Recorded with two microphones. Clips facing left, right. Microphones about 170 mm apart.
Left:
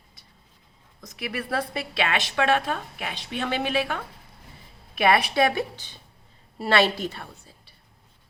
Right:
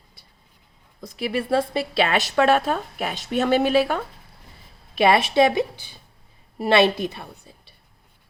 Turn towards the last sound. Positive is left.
turn(degrees=-20)  # may be behind; listen again after turning